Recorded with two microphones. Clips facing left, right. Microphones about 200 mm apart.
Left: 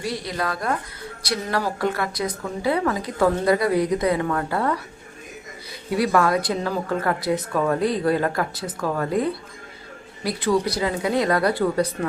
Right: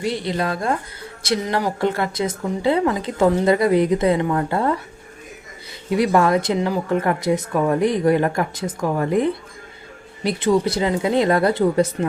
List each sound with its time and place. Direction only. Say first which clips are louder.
0.0 s speech: right 4 dB; 25° right (ahead or behind)
5.9 s speech: right 3 dB; 20° right (ahead or behind)